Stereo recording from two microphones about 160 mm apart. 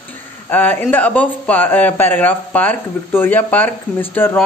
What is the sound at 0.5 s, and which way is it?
Speech, 10° left (ahead or behind).